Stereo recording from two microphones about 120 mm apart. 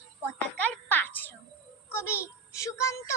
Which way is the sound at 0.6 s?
15° left (ahead or behind).